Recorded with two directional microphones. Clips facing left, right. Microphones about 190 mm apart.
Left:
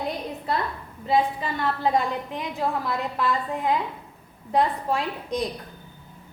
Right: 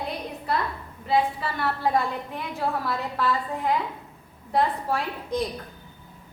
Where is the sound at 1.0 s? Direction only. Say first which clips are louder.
Left 1 dB; 20° left (ahead or behind).